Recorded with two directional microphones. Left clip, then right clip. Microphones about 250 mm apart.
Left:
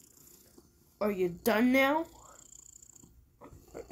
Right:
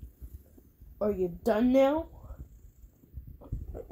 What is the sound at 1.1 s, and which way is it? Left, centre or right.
Speech, left.